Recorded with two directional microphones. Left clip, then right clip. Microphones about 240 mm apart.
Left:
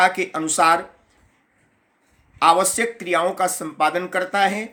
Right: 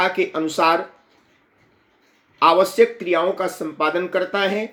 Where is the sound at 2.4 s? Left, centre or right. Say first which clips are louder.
Right 2 dB; centre.